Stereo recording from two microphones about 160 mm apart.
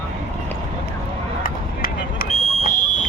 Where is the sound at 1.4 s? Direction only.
65° left (ahead or behind).